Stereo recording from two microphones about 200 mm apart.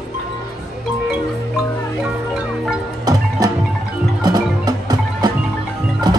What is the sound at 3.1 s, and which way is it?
Music, 20° right (ahead or behind).